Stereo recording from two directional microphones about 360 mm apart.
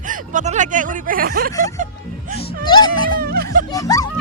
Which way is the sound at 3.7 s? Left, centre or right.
Centre.